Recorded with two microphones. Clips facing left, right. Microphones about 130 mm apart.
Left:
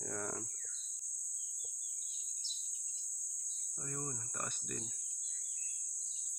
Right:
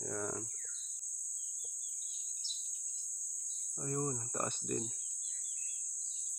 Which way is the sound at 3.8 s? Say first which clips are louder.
Right 8 dB; 35° right (ahead or behind).